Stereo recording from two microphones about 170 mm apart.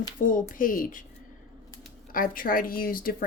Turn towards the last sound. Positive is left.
turn(degrees=60)  # may be behind; listen again after turning